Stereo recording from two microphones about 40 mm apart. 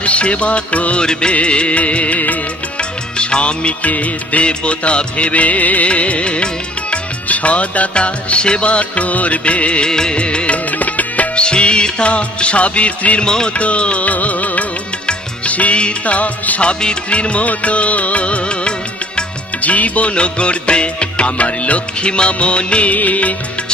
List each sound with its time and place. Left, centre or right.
0.0 s music: left
2.7 s music of bollywood: left
4.4 s music: left
11.3 s music: left
13.2 s music: centre
13.5 s music: left